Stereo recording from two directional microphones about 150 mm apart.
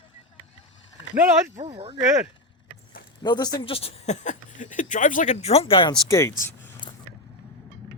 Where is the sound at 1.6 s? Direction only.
45° right (ahead or behind).